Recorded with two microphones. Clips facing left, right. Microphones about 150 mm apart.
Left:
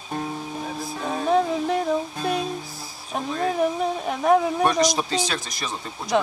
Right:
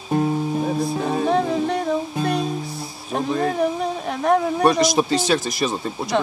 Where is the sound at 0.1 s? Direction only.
15° right (ahead or behind).